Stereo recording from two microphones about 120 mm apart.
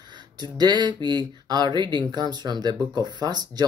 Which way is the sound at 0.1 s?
35° right (ahead or behind).